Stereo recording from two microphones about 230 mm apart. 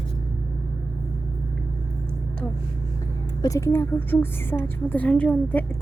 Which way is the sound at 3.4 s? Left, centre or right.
Centre.